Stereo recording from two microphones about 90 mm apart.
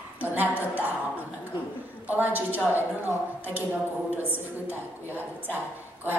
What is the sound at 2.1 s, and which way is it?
A woman's voice, 20° right (ahead or behind).